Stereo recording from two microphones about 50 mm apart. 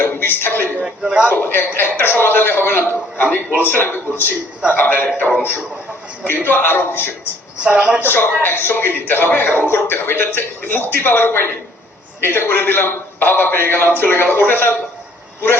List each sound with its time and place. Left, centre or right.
0.0 s a sound: left
0.9 s a man's voice: centre
1.3 s a man's voice: left
7.6 s speech: right
8.0 s a man's voice: left